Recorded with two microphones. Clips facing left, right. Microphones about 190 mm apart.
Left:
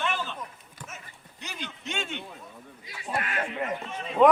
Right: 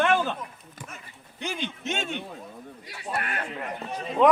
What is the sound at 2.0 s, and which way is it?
Speech, 40° right (ahead or behind).